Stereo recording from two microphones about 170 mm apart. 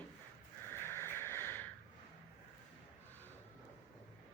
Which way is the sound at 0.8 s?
15° left (ahead or behind).